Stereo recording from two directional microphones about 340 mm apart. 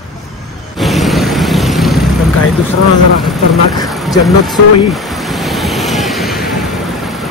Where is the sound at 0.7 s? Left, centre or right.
Centre.